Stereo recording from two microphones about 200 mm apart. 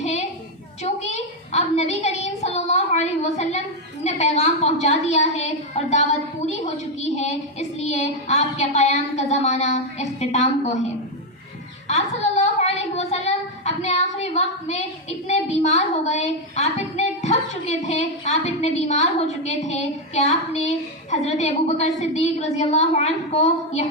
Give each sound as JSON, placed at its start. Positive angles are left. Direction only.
{"t": 0.0, "sound": "a sound", "side_deg": 35}
{"t": 4.0, "sound": "a woman's voice", "side_deg": 35}
{"t": 7.8, "sound": "a woman's voice", "side_deg": 35}
{"t": 11.9, "sound": "a woman's voice", "side_deg": 35}